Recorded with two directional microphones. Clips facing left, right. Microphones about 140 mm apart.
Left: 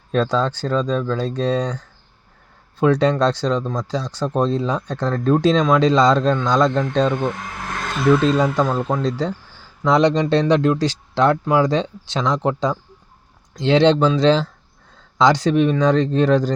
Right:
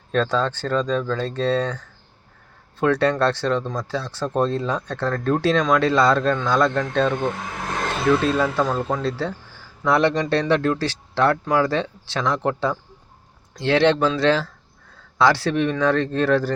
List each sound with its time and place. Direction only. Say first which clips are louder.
0.1 s speech: left 2 dB; 10° left (ahead or behind)
2.8 s speech: left 3 dB; 15° left (ahead or behind)
8.4 s speech: left 2 dB; 15° left (ahead or behind)